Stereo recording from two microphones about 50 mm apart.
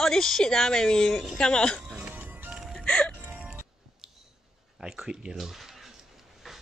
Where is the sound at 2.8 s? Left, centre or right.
Centre.